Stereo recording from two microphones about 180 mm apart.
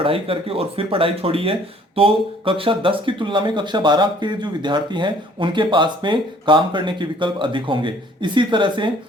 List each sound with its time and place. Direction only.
0.0 s speech: 30° right (ahead or behind)